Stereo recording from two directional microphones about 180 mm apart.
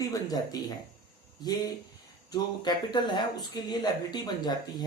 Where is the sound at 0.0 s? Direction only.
20° left (ahead or behind).